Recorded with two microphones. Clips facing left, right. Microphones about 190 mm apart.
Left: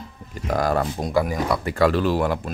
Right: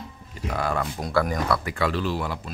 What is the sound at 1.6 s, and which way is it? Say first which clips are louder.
Speech: left 6 dB; 40° left (ahead or behind).